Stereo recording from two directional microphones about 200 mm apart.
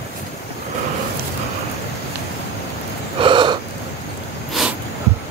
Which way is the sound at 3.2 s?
25° right (ahead or behind).